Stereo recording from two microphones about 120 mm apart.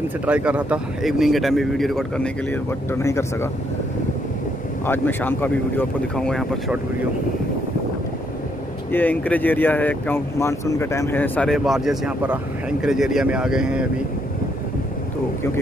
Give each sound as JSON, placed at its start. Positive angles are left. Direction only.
{"t": 0.3, "sound": "speech", "side_deg": -10}
{"t": 1.0, "sound": "speech", "side_deg": 0}
{"t": 2.9, "sound": "speech", "side_deg": 20}
{"t": 4.8, "sound": "speech", "side_deg": 15}
{"t": 6.1, "sound": "speech", "side_deg": 5}
{"t": 8.9, "sound": "speech", "side_deg": 15}
{"t": 11.5, "sound": "speech", "side_deg": 0}